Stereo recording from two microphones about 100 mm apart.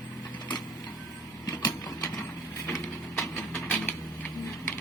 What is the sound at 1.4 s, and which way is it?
Printer, 35° left (ahead or behind).